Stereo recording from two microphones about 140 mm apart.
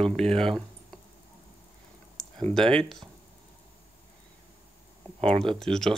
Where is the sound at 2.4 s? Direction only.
5° left (ahead or behind).